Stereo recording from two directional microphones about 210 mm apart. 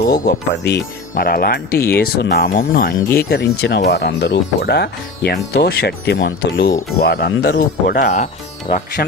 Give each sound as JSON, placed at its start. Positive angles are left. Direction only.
{"t": 0.3, "sound": "speech", "side_deg": 55}